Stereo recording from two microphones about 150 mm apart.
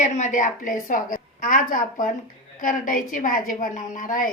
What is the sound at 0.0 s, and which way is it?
A woman's voice, 55° left (ahead or behind).